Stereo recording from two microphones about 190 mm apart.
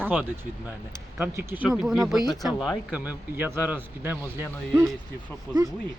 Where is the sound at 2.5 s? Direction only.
20° left (ahead or behind).